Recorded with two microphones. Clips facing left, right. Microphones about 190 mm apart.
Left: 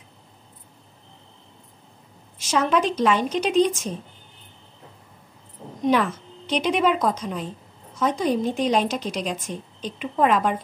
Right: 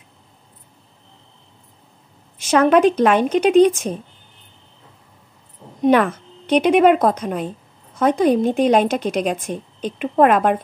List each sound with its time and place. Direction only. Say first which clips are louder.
2.3 s a woman's voice: right 7 dB; 55° right (ahead or behind)
5.9 s a woman's voice: right 6 dB; 60° right (ahead or behind)